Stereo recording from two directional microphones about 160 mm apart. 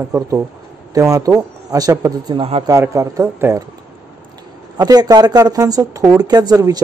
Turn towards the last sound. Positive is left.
turn(degrees=-25)  # may be behind; listen again after turning